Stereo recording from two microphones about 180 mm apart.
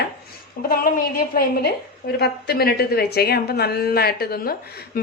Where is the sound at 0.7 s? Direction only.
55° left (ahead or behind).